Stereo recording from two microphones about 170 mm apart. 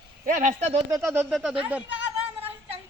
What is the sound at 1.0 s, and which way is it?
Speech, 10° right (ahead or behind).